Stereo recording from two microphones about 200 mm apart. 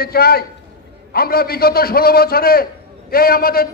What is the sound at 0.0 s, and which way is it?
A man's voice, 50° left (ahead or behind).